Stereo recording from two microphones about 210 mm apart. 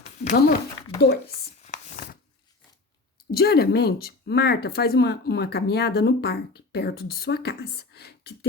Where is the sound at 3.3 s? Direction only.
50° left (ahead or behind).